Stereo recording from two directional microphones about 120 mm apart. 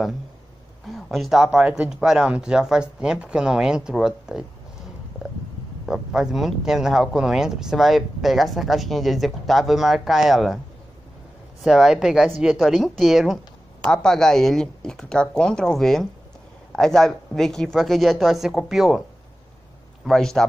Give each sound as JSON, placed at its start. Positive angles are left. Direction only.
{"t": 0.8, "sound": "speech", "side_deg": 0}
{"t": 5.2, "sound": "stomach rumble", "side_deg": -5}
{"t": 5.9, "sound": "speech", "side_deg": -5}
{"t": 11.6, "sound": "speech", "side_deg": -5}
{"t": 20.1, "sound": "speech", "side_deg": 5}